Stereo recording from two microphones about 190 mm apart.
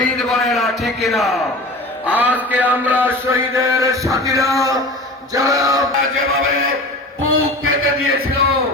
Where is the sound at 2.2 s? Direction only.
10° right (ahead or behind).